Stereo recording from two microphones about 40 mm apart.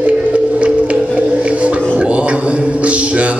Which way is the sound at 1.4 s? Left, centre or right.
Right.